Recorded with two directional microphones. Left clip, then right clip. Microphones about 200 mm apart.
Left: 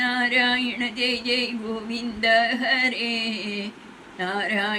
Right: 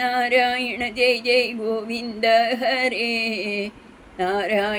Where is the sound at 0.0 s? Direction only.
50° right (ahead or behind).